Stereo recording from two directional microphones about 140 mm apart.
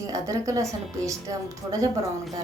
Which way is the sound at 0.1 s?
25° right (ahead or behind).